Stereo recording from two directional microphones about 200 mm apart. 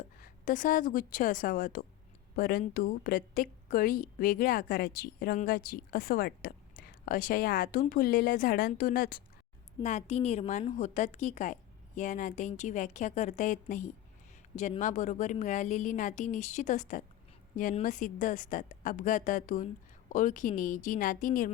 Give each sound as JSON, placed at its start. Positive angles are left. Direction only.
{"t": 0.2, "sound": "a woman's voice", "side_deg": 40}
{"t": 9.8, "sound": "a woman's voice", "side_deg": 35}